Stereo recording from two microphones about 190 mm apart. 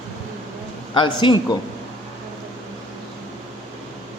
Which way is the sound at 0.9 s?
25° left (ahead or behind).